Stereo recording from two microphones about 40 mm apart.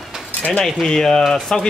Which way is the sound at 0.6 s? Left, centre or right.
Centre.